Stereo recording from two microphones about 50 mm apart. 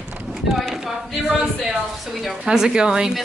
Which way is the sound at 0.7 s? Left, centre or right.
Centre.